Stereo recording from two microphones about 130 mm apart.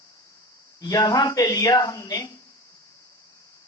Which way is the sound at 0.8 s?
25° left (ahead or behind).